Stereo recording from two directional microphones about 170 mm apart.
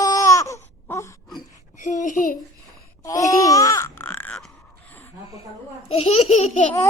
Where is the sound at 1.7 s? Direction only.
45° left (ahead or behind).